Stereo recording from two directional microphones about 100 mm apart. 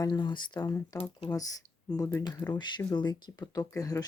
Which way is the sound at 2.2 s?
45° left (ahead or behind).